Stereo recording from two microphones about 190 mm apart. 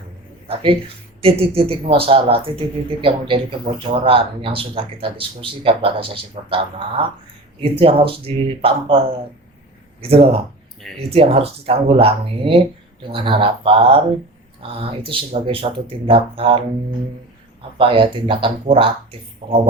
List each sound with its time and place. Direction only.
0.4 s speech: 30° right (ahead or behind)
15.1 s speech: 30° right (ahead or behind)
17.7 s speech: 25° right (ahead or behind)